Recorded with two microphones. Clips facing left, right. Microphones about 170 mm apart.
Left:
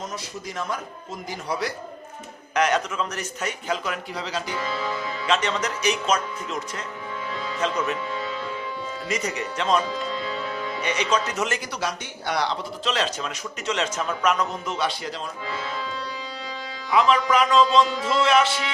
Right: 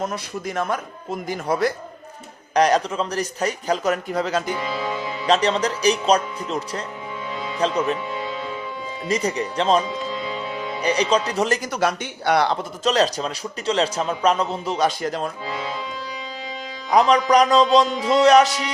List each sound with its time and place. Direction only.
0.0 s a man's voice: 55° right (ahead or behind)
2.6 s speech: 35° right (ahead or behind)
4.5 s speech: 20° right (ahead or behind)
5.2 s speech: 35° right (ahead or behind)
9.0 s speech: 35° right (ahead or behind)
11.8 s speech: 60° right (ahead or behind); by 14.8 s 30° right (ahead or behind)
14.8 s speech: 45° right (ahead or behind)
16.9 s speech: 40° right (ahead or behind)